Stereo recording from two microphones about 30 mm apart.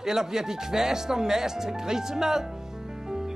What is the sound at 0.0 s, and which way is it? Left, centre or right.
Speech, centre.